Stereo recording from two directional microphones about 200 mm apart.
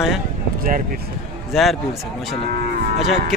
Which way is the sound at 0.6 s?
45° right (ahead or behind).